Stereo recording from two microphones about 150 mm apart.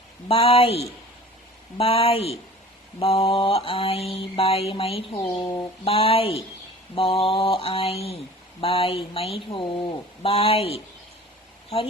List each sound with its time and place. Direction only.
0.3 s mantra: 40° left (ahead or behind)